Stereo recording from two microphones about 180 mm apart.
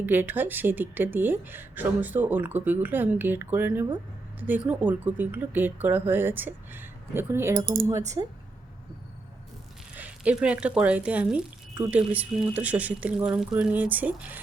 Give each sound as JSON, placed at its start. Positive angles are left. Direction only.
{"t": 0.0, "sound": "speech", "side_deg": -10}
{"t": 9.9, "sound": "speech", "side_deg": -10}